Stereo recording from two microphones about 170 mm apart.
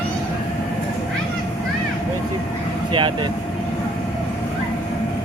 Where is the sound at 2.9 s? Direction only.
30° right (ahead or behind).